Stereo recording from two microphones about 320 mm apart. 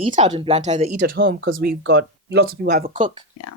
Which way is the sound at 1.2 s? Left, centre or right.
Right.